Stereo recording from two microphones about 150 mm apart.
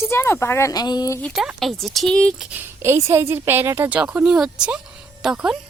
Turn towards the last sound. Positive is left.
turn(degrees=-5)  # may be behind; listen again after turning